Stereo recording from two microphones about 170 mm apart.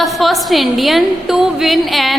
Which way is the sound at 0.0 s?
Centre (ahead or behind).